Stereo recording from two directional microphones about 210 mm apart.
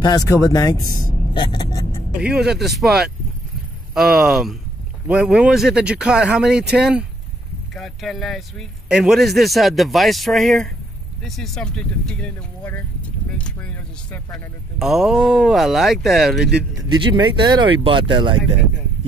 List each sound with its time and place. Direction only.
0.0 s speech: 15° left (ahead or behind)
2.1 s a man's voice: 5° right (ahead or behind)
16.9 s speech: 20° right (ahead or behind)